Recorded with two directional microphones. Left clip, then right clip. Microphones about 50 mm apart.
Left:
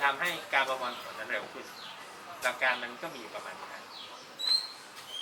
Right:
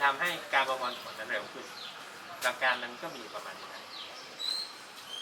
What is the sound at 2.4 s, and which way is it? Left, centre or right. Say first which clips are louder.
Speech: even; centre.